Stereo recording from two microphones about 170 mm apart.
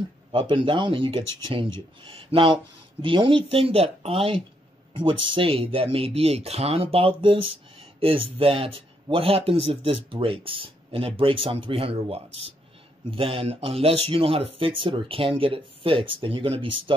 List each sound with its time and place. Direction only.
0.3 s speech: 30° right (ahead or behind)